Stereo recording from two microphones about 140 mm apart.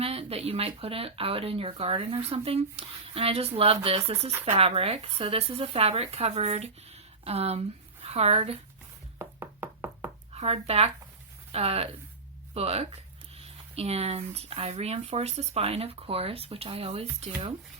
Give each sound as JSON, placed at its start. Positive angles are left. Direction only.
{"t": 0.0, "sound": "a woman's voice", "side_deg": -45}
{"t": 9.1, "sound": "knock", "side_deg": -15}
{"t": 10.3, "sound": "speech", "side_deg": -45}